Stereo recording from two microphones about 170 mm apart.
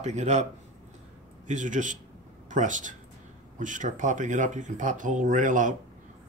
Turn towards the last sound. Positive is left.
turn(degrees=-50)  # may be behind; listen again after turning